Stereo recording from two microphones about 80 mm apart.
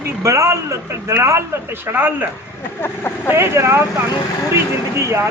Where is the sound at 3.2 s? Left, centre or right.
Right.